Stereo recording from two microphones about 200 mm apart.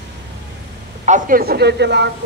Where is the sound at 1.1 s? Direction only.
40° right (ahead or behind); by 2.1 s 60° right (ahead or behind).